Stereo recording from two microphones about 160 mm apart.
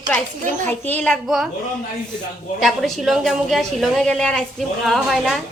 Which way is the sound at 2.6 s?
Centre (ahead or behind).